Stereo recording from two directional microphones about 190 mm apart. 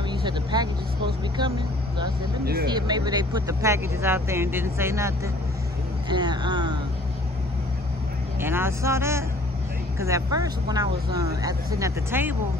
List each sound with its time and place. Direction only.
0.1 s speech: 25° right (ahead or behind)
2.4 s speech: 55° right (ahead or behind)
2.7 s speech: 20° right (ahead or behind)
8.4 s speech: 10° right (ahead or behind)